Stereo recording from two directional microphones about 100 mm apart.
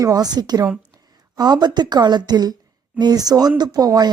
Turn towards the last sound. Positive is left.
turn(degrees=-40)  # may be behind; listen again after turning